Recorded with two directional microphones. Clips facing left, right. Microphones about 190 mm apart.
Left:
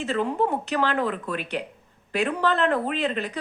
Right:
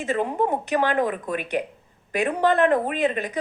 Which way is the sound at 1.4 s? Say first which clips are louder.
Right 4 dB; 50° right (ahead or behind).